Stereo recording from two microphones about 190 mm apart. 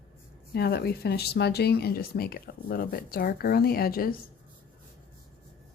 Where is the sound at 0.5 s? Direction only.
55° left (ahead or behind).